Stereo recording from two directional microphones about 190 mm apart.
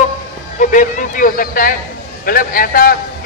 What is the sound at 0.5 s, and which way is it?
A man's voice, 45° left (ahead or behind).